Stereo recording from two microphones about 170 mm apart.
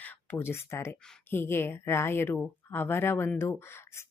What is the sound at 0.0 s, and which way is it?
A woman's voice, 10° left (ahead or behind).